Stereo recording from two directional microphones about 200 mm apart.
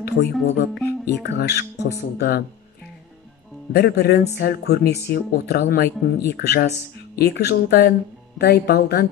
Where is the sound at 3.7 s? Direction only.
55° left (ahead or behind).